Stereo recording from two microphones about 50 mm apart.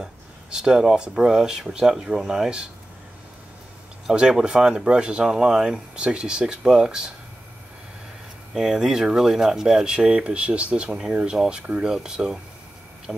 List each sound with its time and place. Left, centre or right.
0.0 s speech: centre
4.1 s speech: centre
8.5 s speech: centre